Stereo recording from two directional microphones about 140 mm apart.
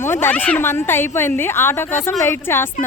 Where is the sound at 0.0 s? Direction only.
15° left (ahead or behind).